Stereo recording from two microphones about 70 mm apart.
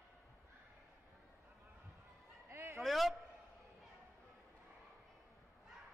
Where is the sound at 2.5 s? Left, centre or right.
Right.